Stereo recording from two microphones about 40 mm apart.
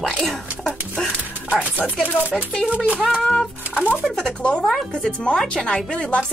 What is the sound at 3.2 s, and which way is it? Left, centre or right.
Speech, left.